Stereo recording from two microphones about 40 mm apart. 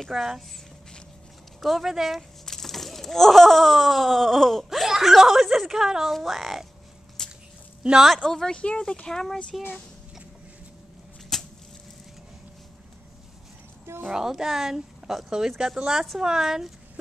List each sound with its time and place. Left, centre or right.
0.1 s a woman's voice: centre
1.6 s speech: centre
2.4 s a sound: centre
4.6 s a woman's voice: centre
7.2 s a sound: centre
7.8 s a woman's voice: centre
8.3 s speech: centre
8.5 s speech: left
11.3 s a sound: centre
14.1 s a woman's voice: centre
15.2 s a woman's voice: centre